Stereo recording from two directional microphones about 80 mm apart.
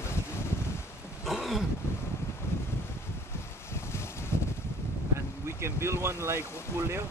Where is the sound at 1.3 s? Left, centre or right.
Centre.